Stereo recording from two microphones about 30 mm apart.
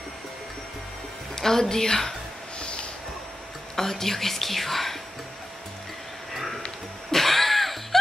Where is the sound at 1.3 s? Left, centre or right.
Centre.